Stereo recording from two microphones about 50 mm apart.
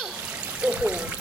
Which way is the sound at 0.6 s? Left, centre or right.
Right.